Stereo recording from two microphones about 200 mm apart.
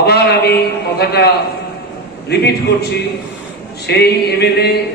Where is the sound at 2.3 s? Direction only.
55° left (ahead or behind).